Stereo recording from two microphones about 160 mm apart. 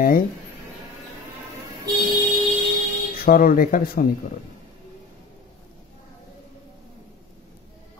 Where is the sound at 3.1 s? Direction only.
65° left (ahead or behind).